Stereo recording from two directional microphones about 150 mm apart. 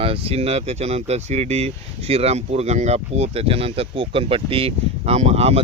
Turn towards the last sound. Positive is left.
turn(degrees=-45)  # may be behind; listen again after turning